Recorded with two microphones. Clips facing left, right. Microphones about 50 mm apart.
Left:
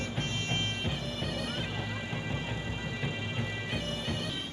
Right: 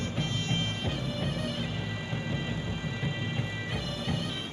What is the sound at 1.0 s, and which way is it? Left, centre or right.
Bagpipes, right.